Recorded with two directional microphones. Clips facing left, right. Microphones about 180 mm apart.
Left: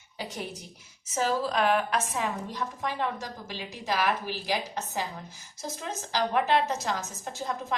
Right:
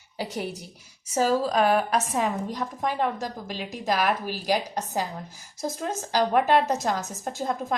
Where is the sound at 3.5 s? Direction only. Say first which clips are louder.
Right 4 dB; 15° right (ahead or behind).